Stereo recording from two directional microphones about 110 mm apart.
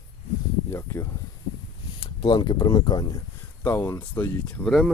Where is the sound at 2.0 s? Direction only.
50° left (ahead or behind).